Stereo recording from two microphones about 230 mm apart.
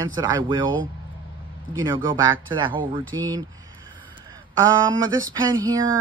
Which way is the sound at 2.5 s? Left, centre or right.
Right.